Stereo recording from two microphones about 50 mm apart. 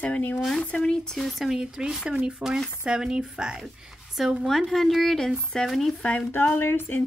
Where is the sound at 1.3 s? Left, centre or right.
Centre.